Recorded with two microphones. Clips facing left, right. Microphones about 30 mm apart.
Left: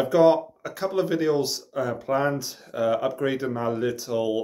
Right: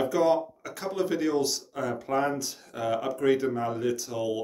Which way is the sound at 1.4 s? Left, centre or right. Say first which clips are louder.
Left 3 dB; centre.